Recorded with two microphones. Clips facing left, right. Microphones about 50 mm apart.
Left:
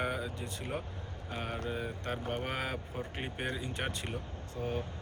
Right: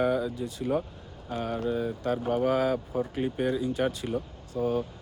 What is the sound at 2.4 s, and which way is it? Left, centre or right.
Speech, left.